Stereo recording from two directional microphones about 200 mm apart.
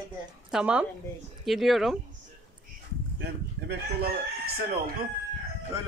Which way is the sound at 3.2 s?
50° right (ahead or behind).